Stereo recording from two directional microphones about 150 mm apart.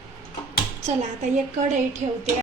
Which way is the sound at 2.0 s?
60° right (ahead or behind).